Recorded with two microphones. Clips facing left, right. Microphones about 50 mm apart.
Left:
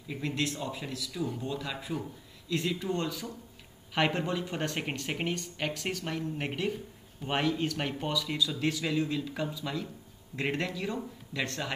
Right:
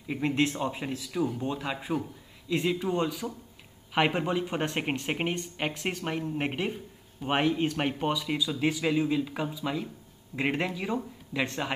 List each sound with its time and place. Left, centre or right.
0.1 s a man's voice: right